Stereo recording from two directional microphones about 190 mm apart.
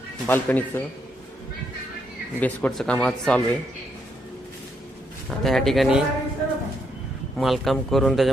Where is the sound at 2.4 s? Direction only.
5° left (ahead or behind).